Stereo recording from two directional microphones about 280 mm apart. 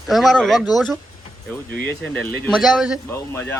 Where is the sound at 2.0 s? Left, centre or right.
Centre.